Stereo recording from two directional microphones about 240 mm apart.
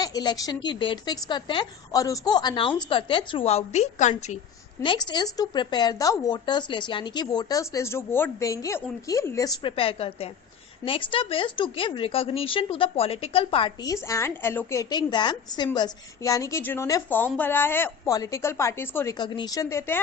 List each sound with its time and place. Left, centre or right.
0.0 s a woman's voice: centre
4.8 s speech: centre